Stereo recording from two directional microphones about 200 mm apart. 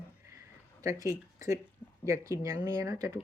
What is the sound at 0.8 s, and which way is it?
Speech, 15° right (ahead or behind).